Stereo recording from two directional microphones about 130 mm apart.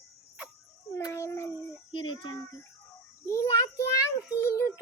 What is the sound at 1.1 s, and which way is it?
Speech, 20° left (ahead or behind).